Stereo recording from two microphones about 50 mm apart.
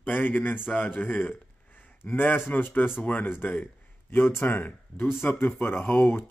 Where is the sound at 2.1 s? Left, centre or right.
Left.